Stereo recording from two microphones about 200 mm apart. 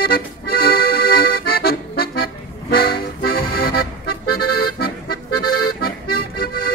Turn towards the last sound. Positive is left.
turn(degrees=45)  # may be behind; listen again after turning